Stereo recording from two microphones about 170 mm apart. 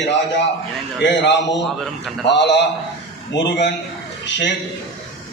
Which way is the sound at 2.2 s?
90° left.